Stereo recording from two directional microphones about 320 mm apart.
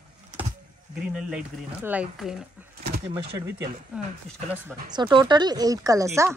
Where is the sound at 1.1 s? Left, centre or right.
Centre.